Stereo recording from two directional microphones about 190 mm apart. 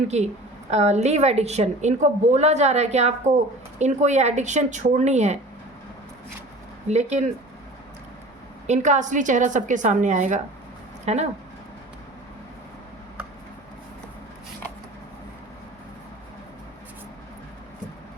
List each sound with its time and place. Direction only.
0.1 s a woman's voice: 35° right (ahead or behind)
6.8 s a woman's voice: 35° right (ahead or behind)
8.6 s a woman's voice: 40° right (ahead or behind)